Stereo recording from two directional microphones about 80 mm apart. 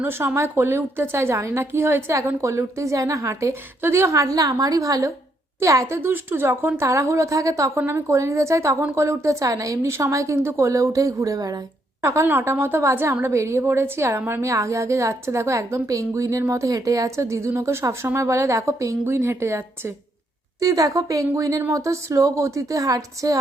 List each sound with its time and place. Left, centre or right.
0.0 s a woman's voice: right
6.0 s a woman's voice: right
7.8 s a woman's voice: right
12.0 s a woman's voice: right
14.4 s a woman's voice: right